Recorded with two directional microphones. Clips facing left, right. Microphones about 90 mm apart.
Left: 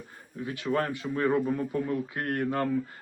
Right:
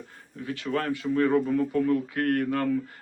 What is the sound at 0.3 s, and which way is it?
Speech, 20° left (ahead or behind).